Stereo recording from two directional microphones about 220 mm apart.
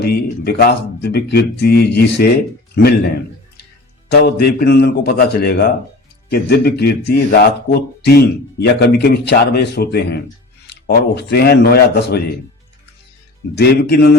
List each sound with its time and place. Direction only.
0.0 s speech: 45° left (ahead or behind)
4.1 s speech: 45° left (ahead or behind)
13.6 s speech: 45° left (ahead or behind)